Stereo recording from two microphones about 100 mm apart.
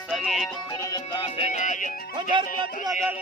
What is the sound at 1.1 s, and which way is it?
Music, 60° left (ahead or behind).